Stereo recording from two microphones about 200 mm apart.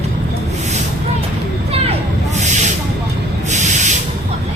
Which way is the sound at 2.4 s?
35° right (ahead or behind).